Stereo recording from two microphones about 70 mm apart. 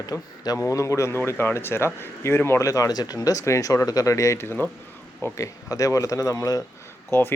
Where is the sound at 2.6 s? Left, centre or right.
Left.